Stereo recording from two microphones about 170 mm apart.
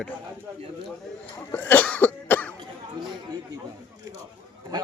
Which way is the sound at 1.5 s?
10° left (ahead or behind).